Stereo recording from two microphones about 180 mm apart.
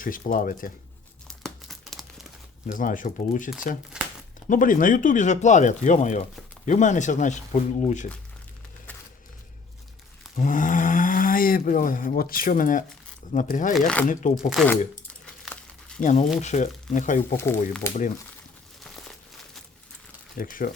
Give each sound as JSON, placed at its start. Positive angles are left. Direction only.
{"t": 0.0, "sound": "speech", "side_deg": 50}
{"t": 1.3, "sound": "crumpling", "side_deg": 0}
{"t": 2.6, "sound": "speech", "side_deg": 50}
{"t": 3.9, "sound": "crumpling", "side_deg": -5}
{"t": 4.4, "sound": "speech", "side_deg": 50}
{"t": 8.9, "sound": "a sound", "side_deg": 10}
{"t": 10.3, "sound": "speech", "side_deg": 45}
{"t": 13.7, "sound": "speech", "side_deg": 5}
{"t": 14.1, "sound": "speech", "side_deg": 45}
{"t": 14.5, "sound": "speech", "side_deg": 0}
{"t": 16.0, "sound": "speech", "side_deg": 45}
{"t": 17.3, "sound": "speech", "side_deg": 15}
{"t": 20.3, "sound": "speech", "side_deg": 50}